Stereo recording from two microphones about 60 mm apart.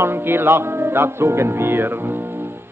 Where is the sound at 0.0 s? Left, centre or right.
Right.